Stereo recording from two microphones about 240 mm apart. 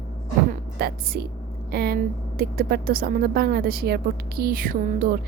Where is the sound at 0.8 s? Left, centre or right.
Right.